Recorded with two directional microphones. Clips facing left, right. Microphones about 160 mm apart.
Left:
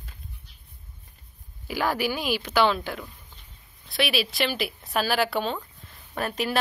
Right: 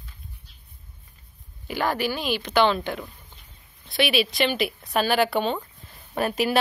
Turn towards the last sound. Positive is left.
turn(degrees=-5)  # may be behind; listen again after turning